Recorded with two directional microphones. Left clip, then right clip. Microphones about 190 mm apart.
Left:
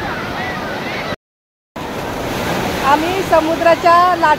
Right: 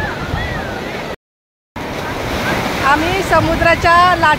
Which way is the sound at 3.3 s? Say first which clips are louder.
Left 1 dB; 10° right (ahead or behind).